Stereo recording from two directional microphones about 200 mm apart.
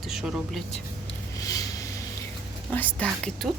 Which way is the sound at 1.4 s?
15° left (ahead or behind).